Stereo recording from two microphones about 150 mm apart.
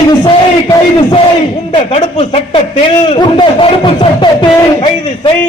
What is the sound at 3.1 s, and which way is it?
Speech, 35° left (ahead or behind).